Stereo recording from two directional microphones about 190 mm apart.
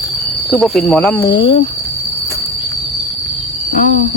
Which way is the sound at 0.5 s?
Centre (ahead or behind).